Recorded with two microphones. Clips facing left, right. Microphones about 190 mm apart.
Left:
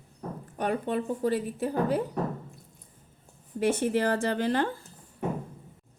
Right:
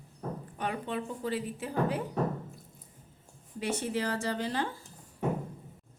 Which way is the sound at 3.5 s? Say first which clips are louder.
Left 7 dB; 50° left (ahead or behind).